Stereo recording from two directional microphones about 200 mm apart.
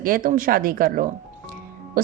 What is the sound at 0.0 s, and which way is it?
A woman's voice, 45° right (ahead or behind).